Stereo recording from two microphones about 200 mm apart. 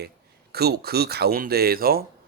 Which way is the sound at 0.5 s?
50° right (ahead or behind).